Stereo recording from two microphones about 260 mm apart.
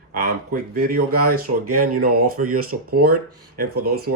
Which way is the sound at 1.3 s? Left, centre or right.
Right.